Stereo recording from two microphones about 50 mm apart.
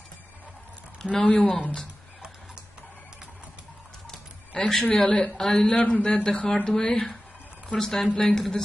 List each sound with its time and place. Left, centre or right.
1.1 s speech: left
4.1 s a sound: centre
5.0 s speech: left
5.4 s speech: centre
5.7 s speech: left
7.7 s speech: centre